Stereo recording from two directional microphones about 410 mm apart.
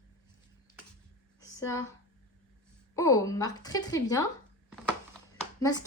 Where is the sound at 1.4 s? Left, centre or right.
Centre.